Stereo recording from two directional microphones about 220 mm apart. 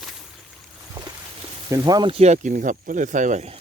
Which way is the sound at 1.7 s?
20° right (ahead or behind).